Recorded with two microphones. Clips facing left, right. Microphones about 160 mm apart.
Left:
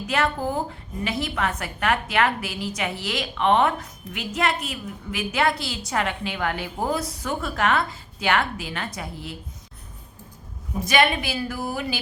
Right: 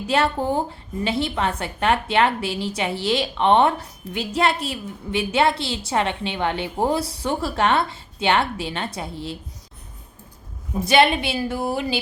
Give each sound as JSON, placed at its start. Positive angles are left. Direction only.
{"t": 0.1, "sound": "a woman's voice", "side_deg": -30}
{"t": 10.8, "sound": "a woman's voice", "side_deg": -30}